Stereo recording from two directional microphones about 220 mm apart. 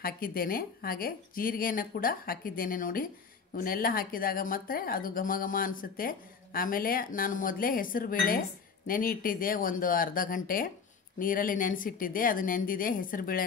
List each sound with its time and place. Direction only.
0.0 s speech: 40° left (ahead or behind)